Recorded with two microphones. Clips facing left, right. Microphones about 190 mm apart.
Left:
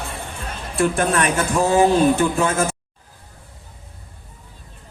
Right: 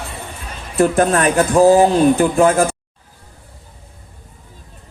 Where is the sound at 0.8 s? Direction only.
40° right (ahead or behind).